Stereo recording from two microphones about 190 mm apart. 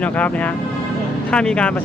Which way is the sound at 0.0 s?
5° left (ahead or behind).